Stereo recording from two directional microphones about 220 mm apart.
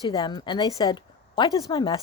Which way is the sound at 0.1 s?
20° left (ahead or behind).